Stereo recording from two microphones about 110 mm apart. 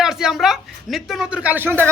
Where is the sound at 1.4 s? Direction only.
20° right (ahead or behind).